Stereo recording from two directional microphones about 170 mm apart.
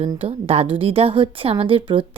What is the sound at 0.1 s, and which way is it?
A woman's voice, 35° right (ahead or behind).